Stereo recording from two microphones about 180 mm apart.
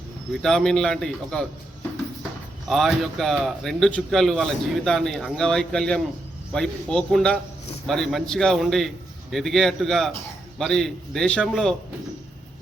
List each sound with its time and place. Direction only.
0.4 s a man's voice: 5° left (ahead or behind)
2.6 s a man's voice: centre (ahead or behind)